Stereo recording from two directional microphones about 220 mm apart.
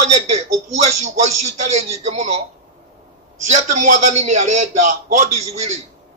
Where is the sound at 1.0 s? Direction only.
30° right (ahead or behind).